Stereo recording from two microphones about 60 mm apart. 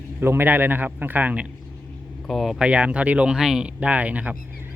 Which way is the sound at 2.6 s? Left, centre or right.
Centre.